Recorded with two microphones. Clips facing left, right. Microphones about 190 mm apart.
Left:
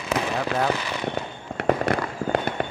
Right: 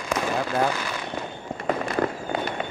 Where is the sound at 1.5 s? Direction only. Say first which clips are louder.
Left 3 dB; 70° left (ahead or behind).